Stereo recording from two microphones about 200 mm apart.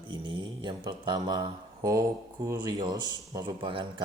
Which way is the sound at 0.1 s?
25° right (ahead or behind).